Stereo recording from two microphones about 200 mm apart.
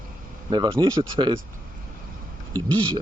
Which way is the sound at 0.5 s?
20° right (ahead or behind).